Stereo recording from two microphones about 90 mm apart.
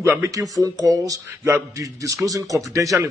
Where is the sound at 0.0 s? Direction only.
30° right (ahead or behind).